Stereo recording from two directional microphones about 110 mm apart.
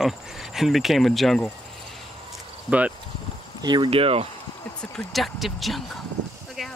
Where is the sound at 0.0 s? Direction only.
5° right (ahead or behind).